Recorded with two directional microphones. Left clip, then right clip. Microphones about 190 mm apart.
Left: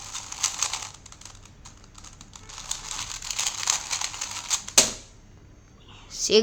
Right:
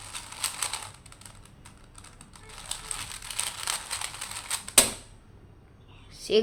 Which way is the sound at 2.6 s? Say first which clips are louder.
Left 4 dB; 10° left (ahead or behind).